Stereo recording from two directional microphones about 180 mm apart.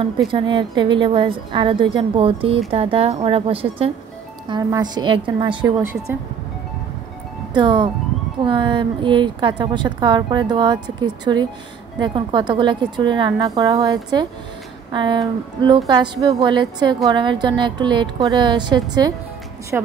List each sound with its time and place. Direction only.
0.3 s a woman's voice: 25° right (ahead or behind)
4.5 s a woman's voice: 20° right (ahead or behind)
7.5 s a woman's voice: 25° right (ahead or behind)
19.7 s a woman's voice: 10° right (ahead or behind)